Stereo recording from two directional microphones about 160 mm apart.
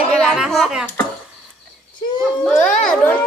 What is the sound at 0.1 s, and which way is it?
Music, centre (ahead or behind).